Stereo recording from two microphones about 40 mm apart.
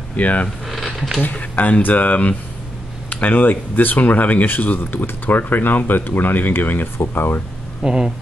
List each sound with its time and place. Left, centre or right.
0.1 s speech: left
0.7 s a sound: centre
1.4 s speech: left
7.2 s speech: left
7.8 s speech: centre